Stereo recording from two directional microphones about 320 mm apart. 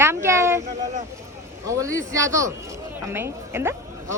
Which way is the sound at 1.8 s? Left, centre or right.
Centre.